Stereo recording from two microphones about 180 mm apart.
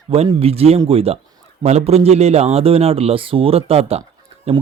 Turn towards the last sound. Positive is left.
turn(degrees=-35)  # may be behind; listen again after turning